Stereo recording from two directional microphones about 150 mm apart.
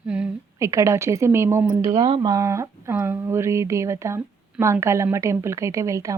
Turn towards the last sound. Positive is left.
turn(degrees=-20)  # may be behind; listen again after turning